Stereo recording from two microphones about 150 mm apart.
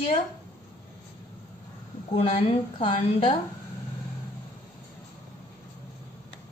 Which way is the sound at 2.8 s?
35° left (ahead or behind).